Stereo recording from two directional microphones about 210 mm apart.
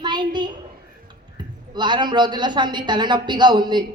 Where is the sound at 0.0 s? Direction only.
20° right (ahead or behind).